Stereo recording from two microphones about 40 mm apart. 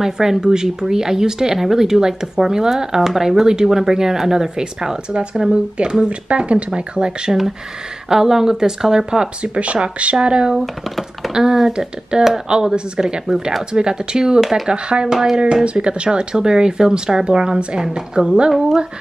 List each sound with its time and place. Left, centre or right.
0.0 s speech: centre
9.4 s speech: right
10.1 s speech: right
10.5 s speech: centre
11.3 s speech: centre
15.1 s speech: centre
15.6 s speech: right